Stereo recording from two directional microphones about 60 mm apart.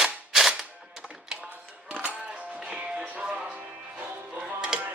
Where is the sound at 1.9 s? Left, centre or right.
Right.